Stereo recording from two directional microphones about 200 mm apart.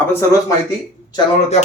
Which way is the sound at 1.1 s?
30° left (ahead or behind).